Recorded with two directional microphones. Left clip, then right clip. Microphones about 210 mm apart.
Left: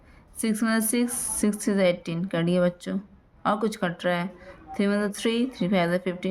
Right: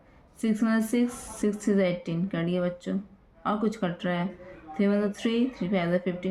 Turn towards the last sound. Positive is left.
turn(degrees=40)  # may be behind; listen again after turning